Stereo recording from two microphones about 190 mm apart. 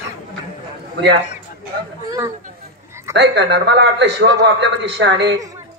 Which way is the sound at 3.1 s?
65° right (ahead or behind).